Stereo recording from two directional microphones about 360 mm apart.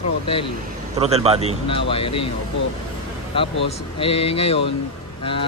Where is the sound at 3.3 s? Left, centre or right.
Centre.